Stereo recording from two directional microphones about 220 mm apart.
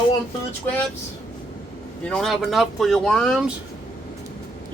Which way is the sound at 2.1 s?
Centre (ahead or behind).